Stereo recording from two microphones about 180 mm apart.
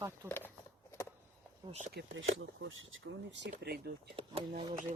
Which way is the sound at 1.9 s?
90° right.